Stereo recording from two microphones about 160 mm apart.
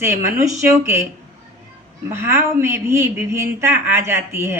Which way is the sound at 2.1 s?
15° right (ahead or behind).